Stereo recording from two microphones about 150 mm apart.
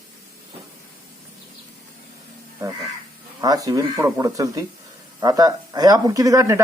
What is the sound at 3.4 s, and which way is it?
Speech, 25° right (ahead or behind).